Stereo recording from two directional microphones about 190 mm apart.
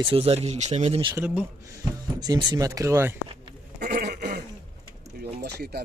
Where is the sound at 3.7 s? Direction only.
55° right (ahead or behind).